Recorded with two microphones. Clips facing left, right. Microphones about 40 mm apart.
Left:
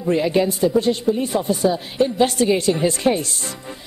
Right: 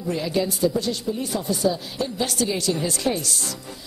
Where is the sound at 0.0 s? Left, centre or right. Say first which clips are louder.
Left 6 dB; left.